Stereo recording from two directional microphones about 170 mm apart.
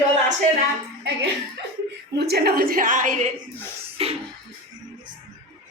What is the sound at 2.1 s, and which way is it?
A woman's voice, 70° right (ahead or behind).